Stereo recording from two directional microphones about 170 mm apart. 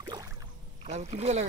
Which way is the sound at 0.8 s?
40° right (ahead or behind).